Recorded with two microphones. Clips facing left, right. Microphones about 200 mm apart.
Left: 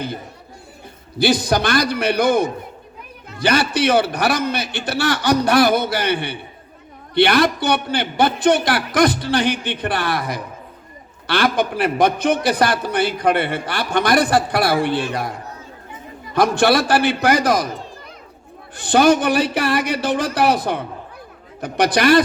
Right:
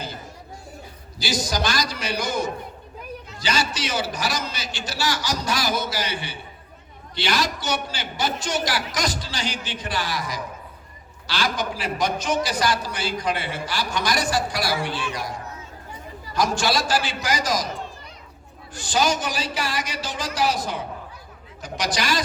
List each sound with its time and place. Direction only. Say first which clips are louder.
1.2 s a man's voice: left 8 dB; 60° left (ahead or behind)
18.8 s a man's voice: left 9 dB; 60° left (ahead or behind)